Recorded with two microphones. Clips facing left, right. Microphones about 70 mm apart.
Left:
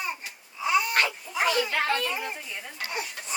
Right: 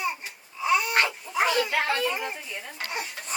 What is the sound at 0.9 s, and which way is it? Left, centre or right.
Dog, right.